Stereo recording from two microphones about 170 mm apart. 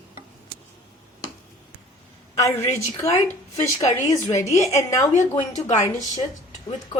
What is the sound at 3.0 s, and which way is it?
A woman's voice, 15° left (ahead or behind).